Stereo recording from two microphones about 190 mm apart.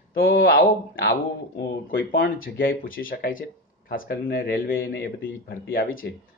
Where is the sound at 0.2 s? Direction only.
50° left (ahead or behind).